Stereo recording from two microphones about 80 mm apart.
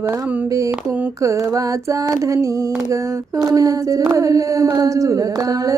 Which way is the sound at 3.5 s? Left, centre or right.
Right.